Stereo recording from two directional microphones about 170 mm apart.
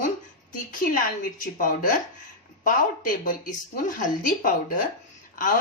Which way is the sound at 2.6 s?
50° left (ahead or behind).